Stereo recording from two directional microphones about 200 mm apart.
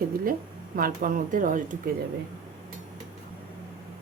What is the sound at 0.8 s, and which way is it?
A woman's voice, 45° right (ahead or behind).